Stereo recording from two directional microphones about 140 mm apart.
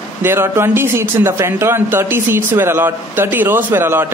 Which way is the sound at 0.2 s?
15° right (ahead or behind).